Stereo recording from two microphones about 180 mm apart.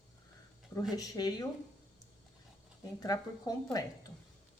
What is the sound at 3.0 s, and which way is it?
Speech, 20° left (ahead or behind).